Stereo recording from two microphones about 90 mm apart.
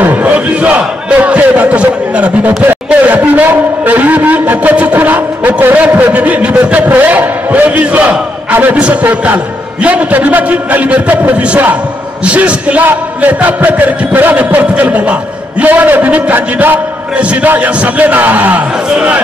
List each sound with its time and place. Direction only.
0.0 s battle cry: 15° right (ahead or behind)
9.8 s a man's voice: 15° right (ahead or behind)